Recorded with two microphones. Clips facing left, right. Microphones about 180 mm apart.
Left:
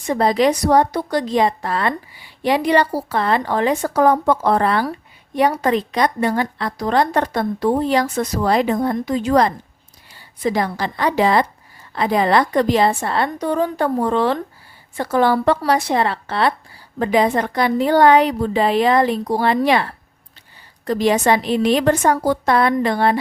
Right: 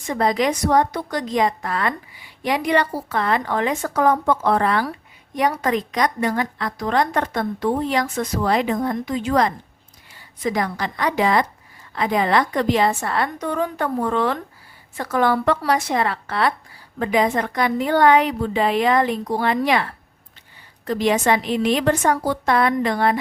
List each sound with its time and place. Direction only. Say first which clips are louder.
0.1 s a woman's voice: left 4 dB; 30° left (ahead or behind)